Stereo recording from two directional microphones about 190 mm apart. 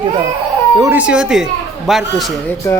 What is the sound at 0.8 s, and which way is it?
Speech, 10° right (ahead or behind).